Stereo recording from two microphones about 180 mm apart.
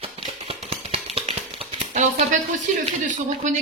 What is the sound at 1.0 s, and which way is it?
Music, 35° right (ahead or behind).